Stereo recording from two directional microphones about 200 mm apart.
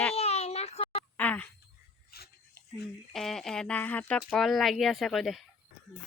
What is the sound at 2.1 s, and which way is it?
Dog, 50° left (ahead or behind).